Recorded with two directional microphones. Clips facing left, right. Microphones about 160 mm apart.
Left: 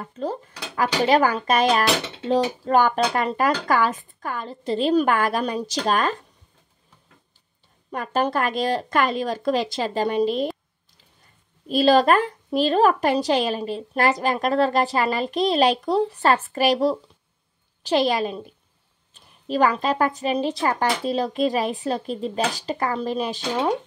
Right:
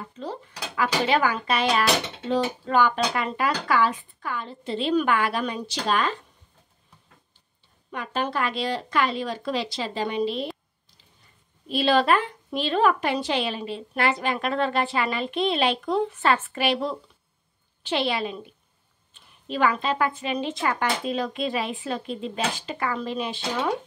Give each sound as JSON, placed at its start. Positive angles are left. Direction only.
{"t": 0.1, "sound": "speech", "side_deg": 45}
{"t": 7.9, "sound": "speech", "side_deg": 45}
{"t": 11.6, "sound": "a woman's voice", "side_deg": 40}